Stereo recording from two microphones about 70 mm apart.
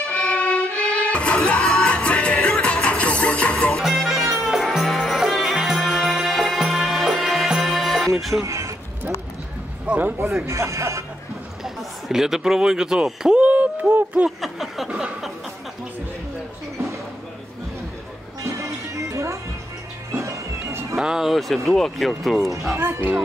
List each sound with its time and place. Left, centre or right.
0.0 s music: centre
3.8 s music: centre
8.2 s speech: centre
8.5 s a sound: right
9.8 s speech: right
10.4 s speech: right
11.6 s a sound: centre; by 14.3 s right
14.4 s a sound: centre
18.4 s music: right
20.9 s speech: centre
22.8 s speech: right